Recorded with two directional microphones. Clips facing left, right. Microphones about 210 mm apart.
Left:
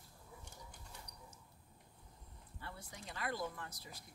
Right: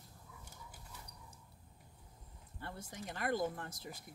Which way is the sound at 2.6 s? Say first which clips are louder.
Right 4 dB; 45° right (ahead or behind).